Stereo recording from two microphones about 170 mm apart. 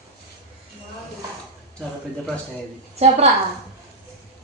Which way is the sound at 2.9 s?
40° right (ahead or behind).